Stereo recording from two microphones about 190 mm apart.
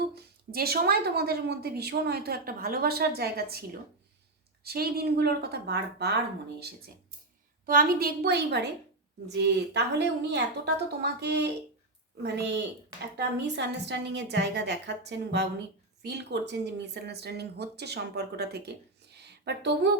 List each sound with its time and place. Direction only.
0.1 s speech: 55° right (ahead or behind)
4.6 s speech: 55° right (ahead or behind)
7.6 s speech: 50° right (ahead or behind)